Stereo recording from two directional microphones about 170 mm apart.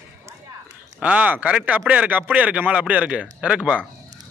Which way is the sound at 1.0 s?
10° right (ahead or behind).